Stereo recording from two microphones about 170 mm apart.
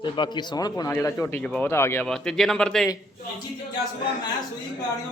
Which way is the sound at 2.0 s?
5° left (ahead or behind).